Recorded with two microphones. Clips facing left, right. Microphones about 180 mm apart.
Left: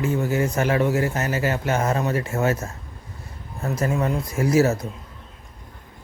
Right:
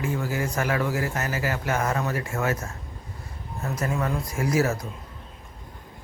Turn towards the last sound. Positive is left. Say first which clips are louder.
# left 5 dB
turn(degrees=25)  # may be behind; listen again after turning